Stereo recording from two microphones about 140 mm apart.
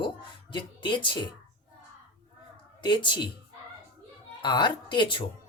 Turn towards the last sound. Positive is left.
turn(degrees=35)  # may be behind; listen again after turning